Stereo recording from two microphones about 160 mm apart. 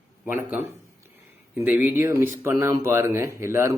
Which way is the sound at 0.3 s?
15° right (ahead or behind).